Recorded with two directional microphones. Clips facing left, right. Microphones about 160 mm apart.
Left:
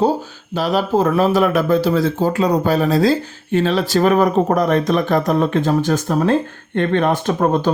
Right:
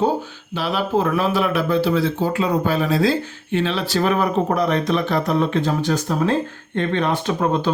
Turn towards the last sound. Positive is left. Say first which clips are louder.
# left 3 dB
turn(degrees=45)  # may be behind; listen again after turning